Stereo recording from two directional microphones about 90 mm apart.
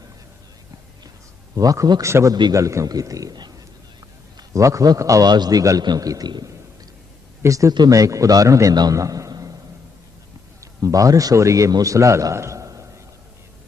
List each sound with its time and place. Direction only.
1.5 s a man's voice: 40° right (ahead or behind)
7.4 s a man's voice: 35° right (ahead or behind)
10.6 s a man's voice: 40° right (ahead or behind)